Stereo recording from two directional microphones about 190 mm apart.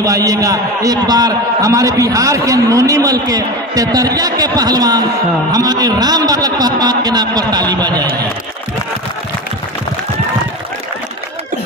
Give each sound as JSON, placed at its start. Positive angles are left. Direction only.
{"t": 0.0, "sound": "a man's voice", "side_deg": -20}